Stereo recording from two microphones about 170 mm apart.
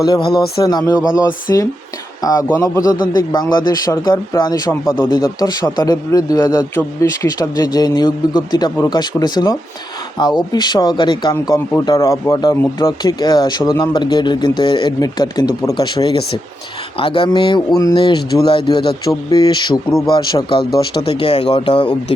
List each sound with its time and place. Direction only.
0.0 s a man's voice: 25° left (ahead or behind)
11.3 s a man's voice: 15° left (ahead or behind); by 21.9 s 30° left (ahead or behind)